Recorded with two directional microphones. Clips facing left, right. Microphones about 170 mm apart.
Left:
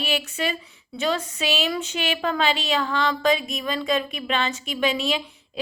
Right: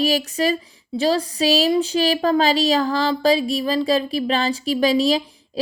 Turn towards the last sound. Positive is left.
turn(degrees=-35)  # may be behind; listen again after turning